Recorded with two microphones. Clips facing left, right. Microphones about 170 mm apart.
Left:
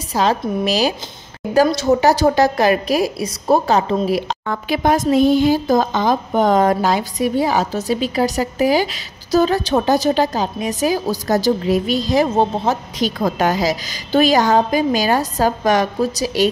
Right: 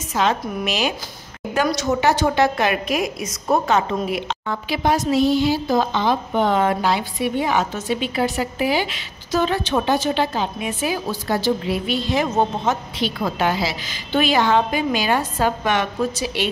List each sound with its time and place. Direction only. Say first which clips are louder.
0.1 s a woman's voice: left 3 dB; 35° left (ahead or behind)